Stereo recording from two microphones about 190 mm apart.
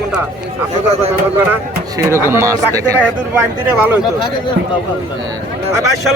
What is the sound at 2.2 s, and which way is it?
A man's voice, 15° right (ahead or behind).